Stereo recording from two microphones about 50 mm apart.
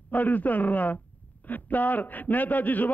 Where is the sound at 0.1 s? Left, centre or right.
Left.